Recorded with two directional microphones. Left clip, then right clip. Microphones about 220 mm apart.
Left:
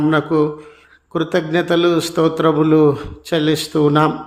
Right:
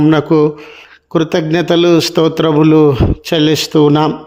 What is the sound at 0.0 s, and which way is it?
A man's voice, 35° right (ahead or behind).